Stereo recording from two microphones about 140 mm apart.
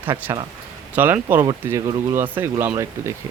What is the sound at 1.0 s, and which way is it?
Speech, 15° right (ahead or behind).